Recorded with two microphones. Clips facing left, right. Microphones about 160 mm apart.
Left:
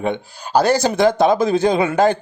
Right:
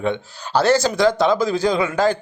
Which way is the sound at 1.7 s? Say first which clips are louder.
Left 3 dB; 25° left (ahead or behind).